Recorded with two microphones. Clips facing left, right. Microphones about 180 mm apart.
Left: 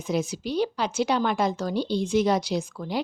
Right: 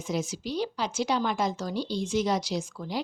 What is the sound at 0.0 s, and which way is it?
A woman's voice, 60° left (ahead or behind).